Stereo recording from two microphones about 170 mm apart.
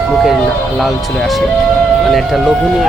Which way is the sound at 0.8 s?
Centre (ahead or behind).